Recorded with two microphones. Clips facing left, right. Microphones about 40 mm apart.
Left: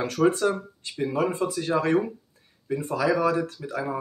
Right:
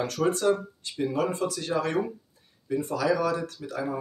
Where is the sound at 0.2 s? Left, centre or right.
Left.